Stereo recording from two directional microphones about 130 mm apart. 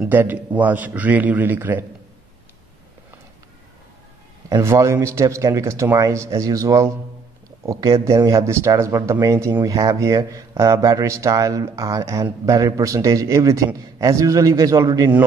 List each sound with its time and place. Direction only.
0.0 s a man's voice: 15° right (ahead or behind)
4.5 s speech: 25° right (ahead or behind)